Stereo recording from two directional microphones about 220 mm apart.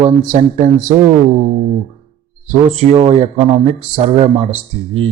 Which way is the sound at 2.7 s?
30° right (ahead or behind).